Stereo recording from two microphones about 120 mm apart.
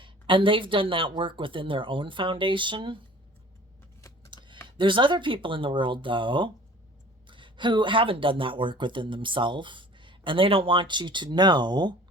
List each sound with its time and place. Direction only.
0.0 s speech: 45° right (ahead or behind)
4.3 s speech: 45° right (ahead or behind)